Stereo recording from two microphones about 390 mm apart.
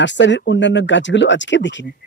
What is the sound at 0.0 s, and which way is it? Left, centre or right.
Speech, left.